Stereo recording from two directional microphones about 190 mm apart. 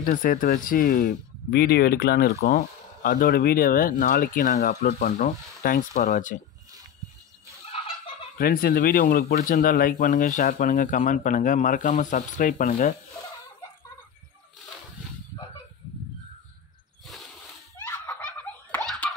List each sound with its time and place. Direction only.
0.0 s speech: 50° left (ahead or behind)
7.7 s turkey: 30° left (ahead or behind)
8.4 s speech: 50° left (ahead or behind)
17.7 s laughter: 10° left (ahead or behind)